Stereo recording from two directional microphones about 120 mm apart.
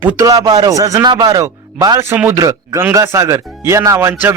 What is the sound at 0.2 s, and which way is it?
Speech, 30° right (ahead or behind).